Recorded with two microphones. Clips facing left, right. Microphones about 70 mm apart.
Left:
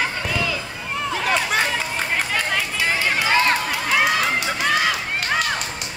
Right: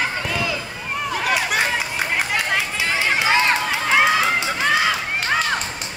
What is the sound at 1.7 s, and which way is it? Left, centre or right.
Run, centre.